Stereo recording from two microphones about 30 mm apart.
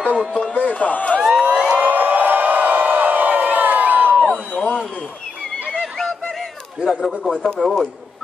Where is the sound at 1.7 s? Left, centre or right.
Right.